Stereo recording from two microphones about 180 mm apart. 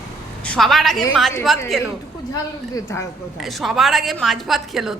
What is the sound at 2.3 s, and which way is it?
Speech, 15° left (ahead or behind).